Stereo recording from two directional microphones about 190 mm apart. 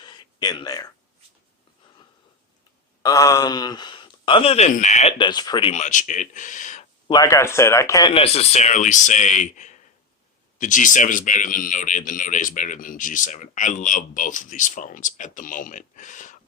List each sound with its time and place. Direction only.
0.0 s a sound: 20° left (ahead or behind)
3.0 s speech: 20° left (ahead or behind); by 5.1 s 35° left (ahead or behind)
5.1 s speech: 25° left (ahead or behind)
5.7 s speech: 40° left (ahead or behind)
7.1 s speech: 20° left (ahead or behind)
8.1 s speech: 30° left (ahead or behind)